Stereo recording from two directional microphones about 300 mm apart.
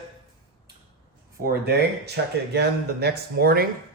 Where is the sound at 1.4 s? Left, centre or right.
Right.